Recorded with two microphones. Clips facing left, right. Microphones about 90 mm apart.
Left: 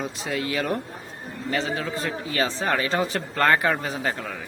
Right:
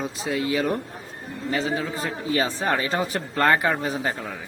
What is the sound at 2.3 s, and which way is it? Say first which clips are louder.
Speech: right 1 dB; 20° right (ahead or behind).